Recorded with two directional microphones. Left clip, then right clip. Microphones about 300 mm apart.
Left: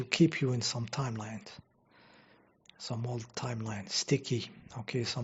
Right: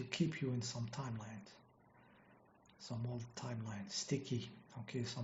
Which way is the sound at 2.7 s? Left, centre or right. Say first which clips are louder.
Left 9 dB; left.